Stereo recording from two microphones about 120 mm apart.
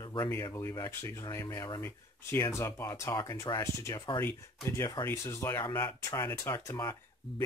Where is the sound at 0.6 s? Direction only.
25° left (ahead or behind).